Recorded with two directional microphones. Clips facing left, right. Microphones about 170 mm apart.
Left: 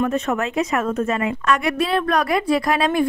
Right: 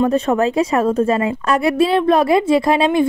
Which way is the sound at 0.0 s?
30° right (ahead or behind).